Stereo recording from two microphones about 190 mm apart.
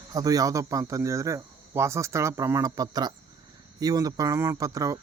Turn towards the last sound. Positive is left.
turn(degrees=-15)  # may be behind; listen again after turning